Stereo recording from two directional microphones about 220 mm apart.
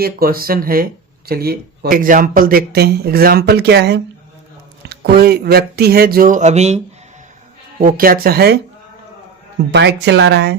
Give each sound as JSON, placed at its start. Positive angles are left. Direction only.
{"t": 0.0, "sound": "speech", "side_deg": -40}
{"t": 9.7, "sound": "speech", "side_deg": -50}